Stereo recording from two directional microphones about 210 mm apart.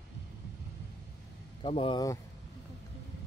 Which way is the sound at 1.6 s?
25° left (ahead or behind).